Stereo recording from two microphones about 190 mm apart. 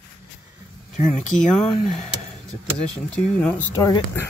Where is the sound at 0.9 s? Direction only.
40° left (ahead or behind).